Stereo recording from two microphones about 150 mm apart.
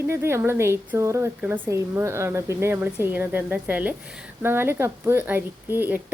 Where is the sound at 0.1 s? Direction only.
15° right (ahead or behind).